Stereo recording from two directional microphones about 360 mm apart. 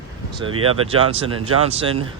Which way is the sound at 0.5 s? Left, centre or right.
Right.